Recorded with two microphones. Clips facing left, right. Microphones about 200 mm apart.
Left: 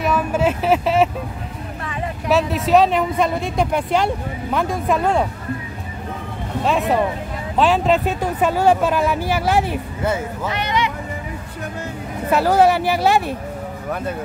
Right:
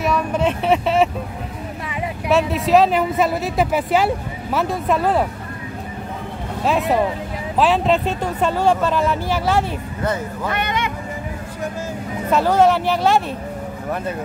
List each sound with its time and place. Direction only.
0.0 s a sound: 5° left (ahead or behind)
2.2 s speech: centre (ahead or behind)
6.6 s speech: centre (ahead or behind)
10.5 s speech: 50° right (ahead or behind)
12.3 s speech: 10° left (ahead or behind)